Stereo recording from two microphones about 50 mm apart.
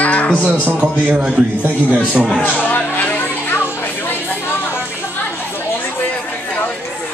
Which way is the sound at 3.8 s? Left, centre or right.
Left.